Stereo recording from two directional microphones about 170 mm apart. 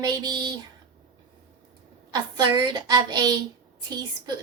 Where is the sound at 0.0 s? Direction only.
20° right (ahead or behind).